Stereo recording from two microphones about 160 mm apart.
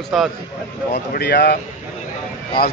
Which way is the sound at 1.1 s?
90° left.